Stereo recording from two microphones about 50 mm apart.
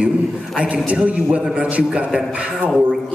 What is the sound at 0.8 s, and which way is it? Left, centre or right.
Speech, right.